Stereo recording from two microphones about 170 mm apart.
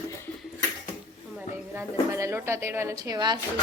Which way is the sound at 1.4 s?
15° right (ahead or behind).